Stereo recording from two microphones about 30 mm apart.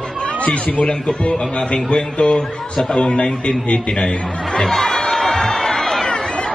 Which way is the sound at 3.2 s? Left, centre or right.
Left.